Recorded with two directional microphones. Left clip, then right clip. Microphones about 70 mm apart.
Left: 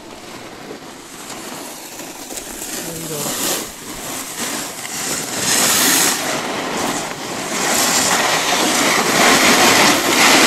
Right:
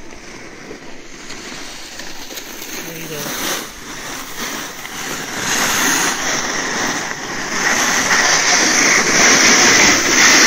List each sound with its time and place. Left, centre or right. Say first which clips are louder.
3.3 s a sound: right 1 dB; left
5.0 s vehicle: left 1 dB; centre
6.2 s vehicle: right 2 dB; centre
7.5 s waves: right 1 dB; centre
8.2 s train: right 3 dB; centre
8.7 s a sound: right 2 dB; centre
9.2 s vehicle: even; left